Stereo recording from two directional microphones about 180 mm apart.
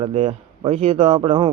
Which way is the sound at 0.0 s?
35° right (ahead or behind).